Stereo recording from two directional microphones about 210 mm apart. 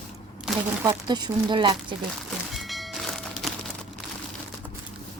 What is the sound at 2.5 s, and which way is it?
Music, centre (ahead or behind).